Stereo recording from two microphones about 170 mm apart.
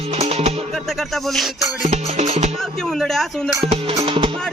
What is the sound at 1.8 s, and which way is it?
Speech, 45° right (ahead or behind).